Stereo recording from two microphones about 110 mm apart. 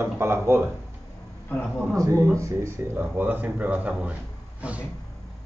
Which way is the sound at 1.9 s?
30° right (ahead or behind).